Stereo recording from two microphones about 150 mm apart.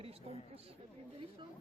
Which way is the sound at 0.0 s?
40° right (ahead or behind).